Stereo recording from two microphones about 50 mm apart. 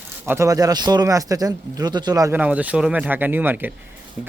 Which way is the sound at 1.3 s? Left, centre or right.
Right.